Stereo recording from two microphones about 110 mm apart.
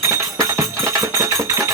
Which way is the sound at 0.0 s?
25° right (ahead or behind).